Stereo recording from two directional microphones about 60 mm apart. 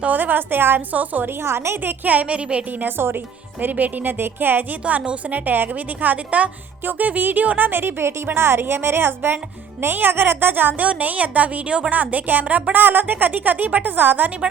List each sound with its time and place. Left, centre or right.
0.0 s a woman's voice: right
1.3 s a woman's voice: right
1.8 s a woman's voice: right
2.8 s a woman's voice: right
4.8 s a woman's voice: right